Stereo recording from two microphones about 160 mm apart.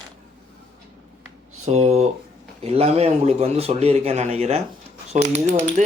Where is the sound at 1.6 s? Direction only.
45° right (ahead or behind).